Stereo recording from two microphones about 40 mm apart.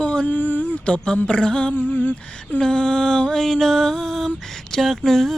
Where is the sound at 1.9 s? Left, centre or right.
Left.